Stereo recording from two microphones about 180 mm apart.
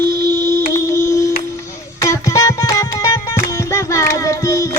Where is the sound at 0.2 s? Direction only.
15° left (ahead or behind).